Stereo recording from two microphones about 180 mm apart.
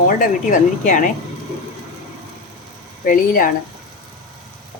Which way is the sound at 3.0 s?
50° left (ahead or behind).